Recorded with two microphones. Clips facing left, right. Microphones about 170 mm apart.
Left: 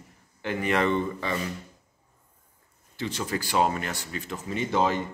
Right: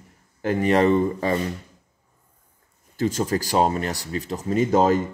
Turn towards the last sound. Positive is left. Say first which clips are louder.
# right 7 dB
turn(degrees=-40)  # may be behind; listen again after turning